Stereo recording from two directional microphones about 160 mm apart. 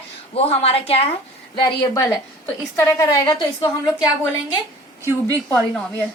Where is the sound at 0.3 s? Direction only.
40° left (ahead or behind).